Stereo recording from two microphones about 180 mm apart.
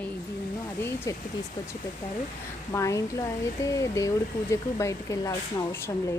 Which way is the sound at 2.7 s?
15° left (ahead or behind).